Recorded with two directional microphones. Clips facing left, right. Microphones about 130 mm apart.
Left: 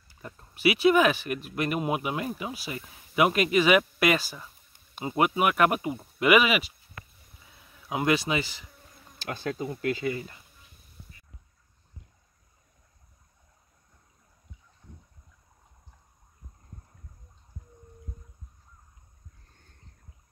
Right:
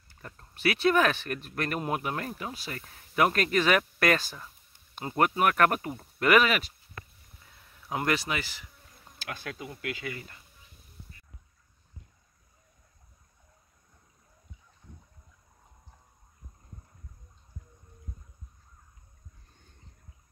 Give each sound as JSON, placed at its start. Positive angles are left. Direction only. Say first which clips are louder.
{"t": 0.2, "sound": "speech", "louder": "left 4 dB", "side_deg": 10}
{"t": 7.9, "sound": "speech", "louder": "left 4 dB", "side_deg": 15}
{"t": 9.2, "sound": "speech", "louder": "left 7 dB", "side_deg": 30}